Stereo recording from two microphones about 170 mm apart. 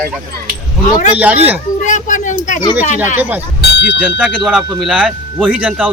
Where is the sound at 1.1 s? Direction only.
10° right (ahead or behind).